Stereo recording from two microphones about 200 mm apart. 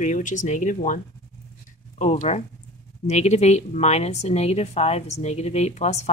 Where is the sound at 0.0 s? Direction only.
40° left (ahead or behind).